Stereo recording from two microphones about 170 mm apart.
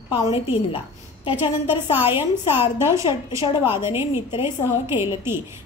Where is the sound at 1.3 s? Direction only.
10° right (ahead or behind).